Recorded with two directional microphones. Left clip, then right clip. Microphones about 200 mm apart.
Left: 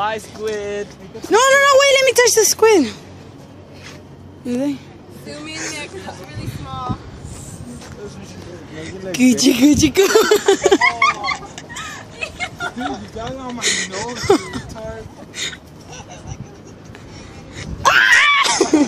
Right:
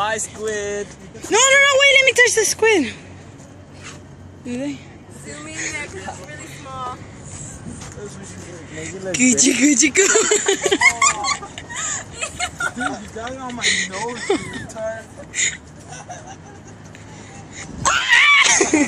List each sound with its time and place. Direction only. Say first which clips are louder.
0.0 s speech: left 1 dB; 35° right (ahead or behind)
1.3 s speech: left 2 dB; 20° left (ahead or behind)
4.5 s speech: left 5 dB; 25° left (ahead or behind)
8.7 s speech: even; 25° left (ahead or behind)
10.8 s dog: even; 55° right (ahead or behind)
12.2 s a sound: even; 10° right (ahead or behind)
13.2 s speech: right 1 dB; 30° left (ahead or behind)
15.9 s vehicle: right 1 dB; 5° right (ahead or behind)
17.6 s screaming: left 6 dB; 35° left (ahead or behind); by 18.9 s 20° left (ahead or behind)